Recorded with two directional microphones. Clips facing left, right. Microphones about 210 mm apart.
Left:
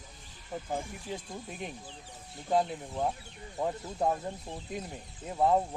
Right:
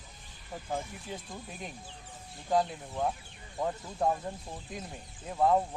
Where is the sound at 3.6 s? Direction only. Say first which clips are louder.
Even; 10° left (ahead or behind).